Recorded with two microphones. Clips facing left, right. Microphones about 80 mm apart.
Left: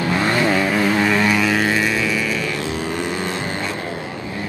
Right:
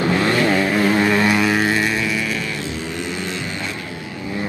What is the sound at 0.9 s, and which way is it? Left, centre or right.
Vehicle, centre.